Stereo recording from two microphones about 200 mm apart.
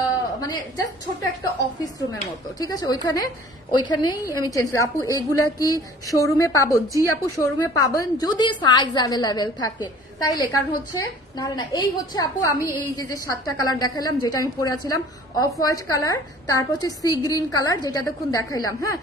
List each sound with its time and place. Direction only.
2.6 s a woman's voice: 20° left (ahead or behind)